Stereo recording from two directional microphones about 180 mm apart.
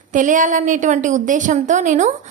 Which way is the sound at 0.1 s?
45° right (ahead or behind).